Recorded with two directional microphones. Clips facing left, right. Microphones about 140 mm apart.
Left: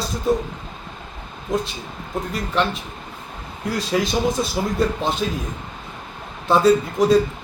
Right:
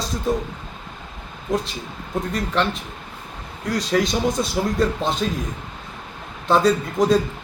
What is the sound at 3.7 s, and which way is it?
Speech, 5° left (ahead or behind).